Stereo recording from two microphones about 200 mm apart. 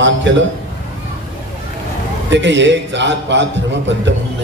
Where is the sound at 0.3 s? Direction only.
65° right (ahead or behind).